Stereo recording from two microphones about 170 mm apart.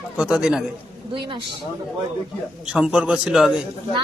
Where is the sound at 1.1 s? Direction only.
30° right (ahead or behind).